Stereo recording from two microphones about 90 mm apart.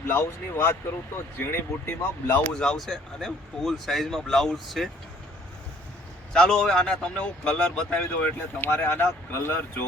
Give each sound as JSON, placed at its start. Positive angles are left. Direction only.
{"t": 0.1, "sound": "speech", "side_deg": 25}
{"t": 2.5, "sound": "speech", "side_deg": 10}
{"t": 6.3, "sound": "speech", "side_deg": 10}